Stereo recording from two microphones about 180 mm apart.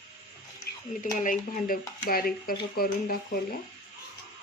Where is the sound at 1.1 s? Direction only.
45° left (ahead or behind).